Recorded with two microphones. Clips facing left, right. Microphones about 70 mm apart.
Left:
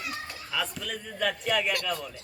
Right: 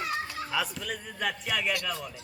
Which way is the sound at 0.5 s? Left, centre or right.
Centre.